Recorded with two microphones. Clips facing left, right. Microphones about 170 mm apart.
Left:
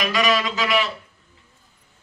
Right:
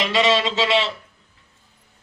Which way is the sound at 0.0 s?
25° right (ahead or behind).